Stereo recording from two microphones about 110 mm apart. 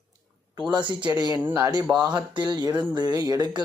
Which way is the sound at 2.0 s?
40° right (ahead or behind).